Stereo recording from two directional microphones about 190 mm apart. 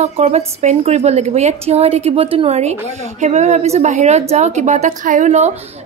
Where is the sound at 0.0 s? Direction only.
35° right (ahead or behind).